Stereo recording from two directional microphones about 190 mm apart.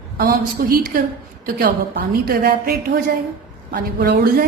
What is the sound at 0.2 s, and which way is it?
Speech, 50° right (ahead or behind).